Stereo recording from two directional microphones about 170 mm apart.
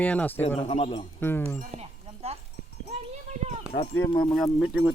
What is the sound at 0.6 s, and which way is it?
Speech, 40° left (ahead or behind).